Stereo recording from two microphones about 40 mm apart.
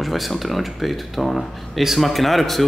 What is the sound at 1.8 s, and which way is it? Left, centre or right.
Speech, centre.